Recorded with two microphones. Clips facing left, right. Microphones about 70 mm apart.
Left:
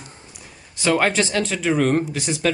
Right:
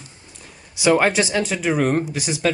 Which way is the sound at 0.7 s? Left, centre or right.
Centre.